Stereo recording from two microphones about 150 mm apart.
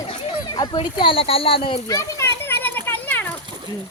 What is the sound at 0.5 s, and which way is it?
Speech, 30° left (ahead or behind).